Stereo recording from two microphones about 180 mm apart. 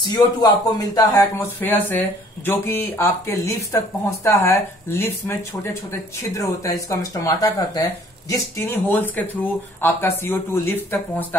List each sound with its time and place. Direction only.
0.0 s speech: 25° left (ahead or behind)